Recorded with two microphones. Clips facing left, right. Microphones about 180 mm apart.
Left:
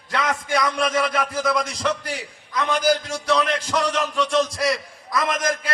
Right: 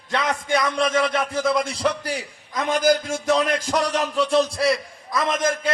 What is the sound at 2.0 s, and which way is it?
A man's voice, 40° right (ahead or behind).